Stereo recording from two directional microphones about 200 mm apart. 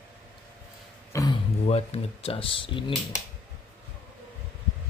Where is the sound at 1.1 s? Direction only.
15° left (ahead or behind).